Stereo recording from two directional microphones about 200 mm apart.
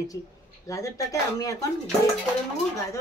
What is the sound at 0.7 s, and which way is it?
Speech, 15° left (ahead or behind).